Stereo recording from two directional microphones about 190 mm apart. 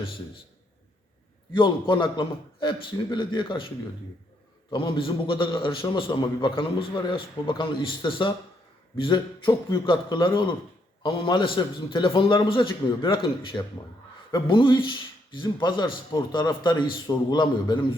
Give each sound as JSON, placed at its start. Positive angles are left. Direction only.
{"t": 1.5, "sound": "a man's voice", "side_deg": 25}
{"t": 4.7, "sound": "a man's voice", "side_deg": 25}